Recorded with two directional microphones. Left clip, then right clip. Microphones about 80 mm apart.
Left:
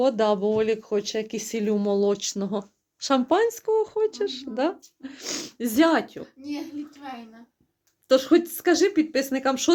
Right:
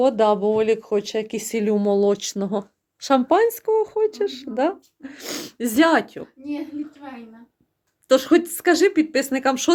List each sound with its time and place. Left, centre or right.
0.0 s speech: centre
8.0 s speech: right